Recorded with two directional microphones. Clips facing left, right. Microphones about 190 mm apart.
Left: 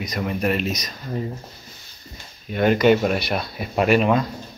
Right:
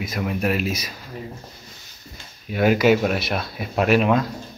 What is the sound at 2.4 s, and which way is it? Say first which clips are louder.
Speech: left 1 dB; 5° right (ahead or behind).